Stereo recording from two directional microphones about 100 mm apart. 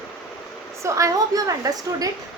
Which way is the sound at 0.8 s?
35° right (ahead or behind).